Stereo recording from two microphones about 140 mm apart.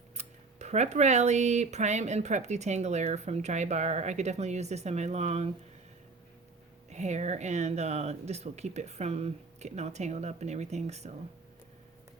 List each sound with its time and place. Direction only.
0.2 s speech: 55° right (ahead or behind)
6.9 s speech: 55° right (ahead or behind)